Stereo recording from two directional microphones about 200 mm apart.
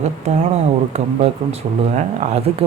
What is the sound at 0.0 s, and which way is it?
Speech, 35° right (ahead or behind).